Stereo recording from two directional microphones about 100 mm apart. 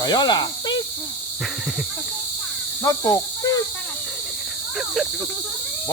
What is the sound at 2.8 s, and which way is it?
Speech, 30° left (ahead or behind).